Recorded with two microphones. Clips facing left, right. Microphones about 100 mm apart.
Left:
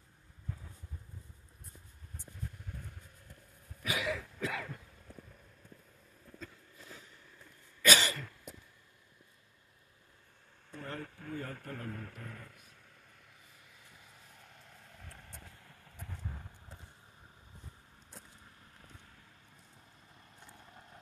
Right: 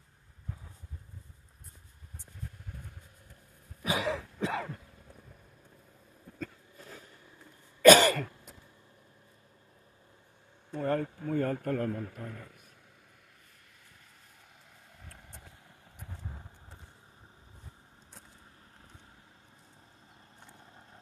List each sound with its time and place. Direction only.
3.8 s throat clearing: 30° right (ahead or behind)
6.4 s a sound: 45° right (ahead or behind)
7.8 s cough: 45° right (ahead or behind)
10.8 s a sound: 50° right (ahead or behind)
11.3 s speech: 50° right (ahead or behind)
11.9 s a man's voice: 10° right (ahead or behind)
14.9 s vehicle: 5° right (ahead or behind)